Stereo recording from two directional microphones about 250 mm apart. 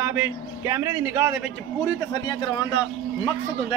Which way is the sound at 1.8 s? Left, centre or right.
Centre.